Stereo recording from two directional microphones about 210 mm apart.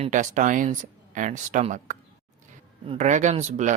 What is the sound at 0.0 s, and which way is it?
Speech, 35° right (ahead or behind).